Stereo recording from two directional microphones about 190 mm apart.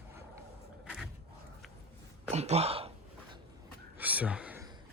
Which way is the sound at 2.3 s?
35° right (ahead or behind).